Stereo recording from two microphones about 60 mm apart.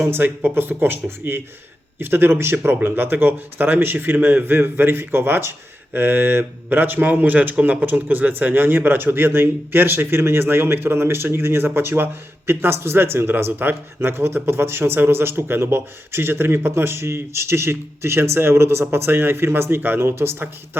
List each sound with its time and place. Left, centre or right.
0.1 s a man's voice: right